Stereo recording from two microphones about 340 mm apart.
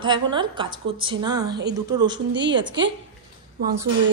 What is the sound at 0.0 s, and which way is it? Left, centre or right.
A woman's voice, centre.